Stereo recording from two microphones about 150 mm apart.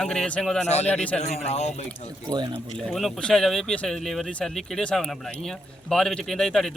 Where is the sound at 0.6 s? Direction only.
45° left (ahead or behind).